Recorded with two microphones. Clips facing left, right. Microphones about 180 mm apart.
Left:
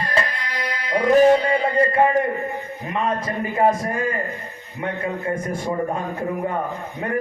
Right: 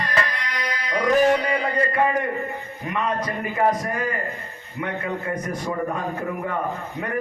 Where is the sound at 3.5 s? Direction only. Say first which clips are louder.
Left 3 dB; 25° left (ahead or behind).